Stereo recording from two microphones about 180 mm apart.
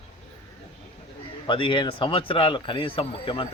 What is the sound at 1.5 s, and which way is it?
Speech, 30° left (ahead or behind).